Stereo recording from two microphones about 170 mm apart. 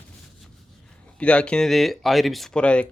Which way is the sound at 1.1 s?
5° left (ahead or behind).